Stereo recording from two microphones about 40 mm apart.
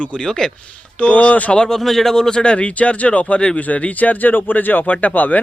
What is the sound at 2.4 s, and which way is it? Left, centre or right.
Speech, left.